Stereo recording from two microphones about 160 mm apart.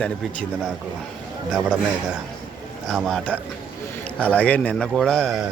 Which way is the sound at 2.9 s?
Centre (ahead or behind).